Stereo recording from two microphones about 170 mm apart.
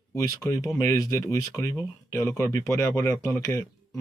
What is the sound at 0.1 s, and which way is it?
Speech, 20° left (ahead or behind).